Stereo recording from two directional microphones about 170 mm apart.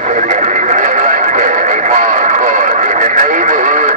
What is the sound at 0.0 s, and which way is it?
Neigh, 45° right (ahead or behind).